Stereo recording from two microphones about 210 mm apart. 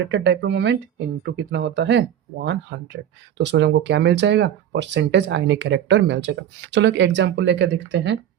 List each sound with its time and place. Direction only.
0.1 s speech: 55° right (ahead or behind)